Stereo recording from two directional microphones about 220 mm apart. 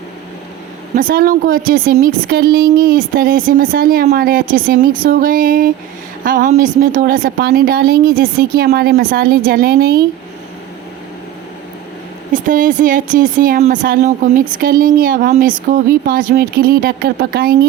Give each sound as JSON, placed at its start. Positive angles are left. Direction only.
{"t": 0.9, "sound": "a woman's voice", "side_deg": -40}
{"t": 12.3, "sound": "speech", "side_deg": -35}